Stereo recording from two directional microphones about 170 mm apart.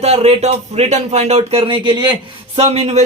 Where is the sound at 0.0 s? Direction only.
35° right (ahead or behind).